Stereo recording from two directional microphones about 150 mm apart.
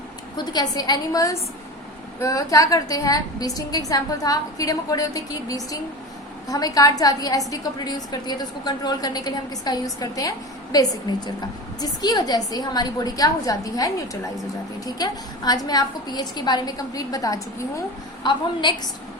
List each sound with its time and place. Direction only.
0.3 s a woman's voice: 25° left (ahead or behind)